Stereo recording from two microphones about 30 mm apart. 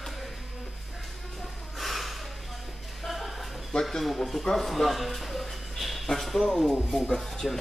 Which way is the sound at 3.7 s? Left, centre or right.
Left.